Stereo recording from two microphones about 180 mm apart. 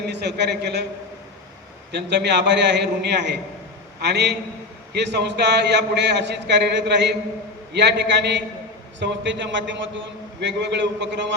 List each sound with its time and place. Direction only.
0.1 s a man's voice: 70° right (ahead or behind)
1.9 s a man's voice: 70° right (ahead or behind); by 10.0 s 90° right
10.4 s a man's voice: 75° right (ahead or behind)